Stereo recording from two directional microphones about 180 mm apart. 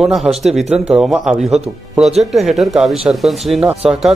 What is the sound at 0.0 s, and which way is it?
Speech, centre (ahead or behind).